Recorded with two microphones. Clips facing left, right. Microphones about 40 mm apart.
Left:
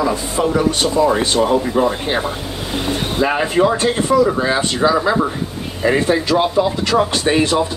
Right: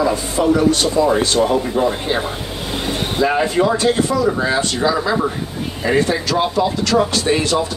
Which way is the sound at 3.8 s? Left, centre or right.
Left.